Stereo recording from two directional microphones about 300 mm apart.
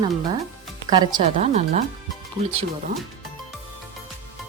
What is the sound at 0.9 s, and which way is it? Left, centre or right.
Speech, centre.